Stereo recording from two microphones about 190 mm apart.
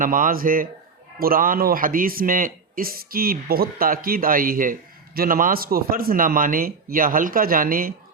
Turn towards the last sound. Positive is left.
turn(degrees=-50)  # may be behind; listen again after turning